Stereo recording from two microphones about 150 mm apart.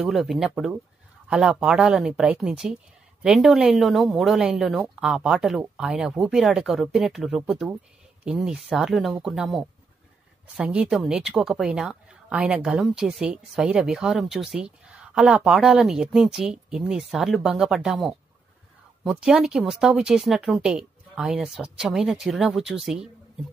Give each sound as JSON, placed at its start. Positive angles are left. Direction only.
{"t": 0.0, "sound": "speech", "side_deg": 0}